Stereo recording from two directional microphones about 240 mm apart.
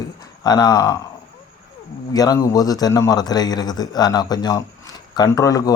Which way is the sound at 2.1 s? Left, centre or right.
Centre.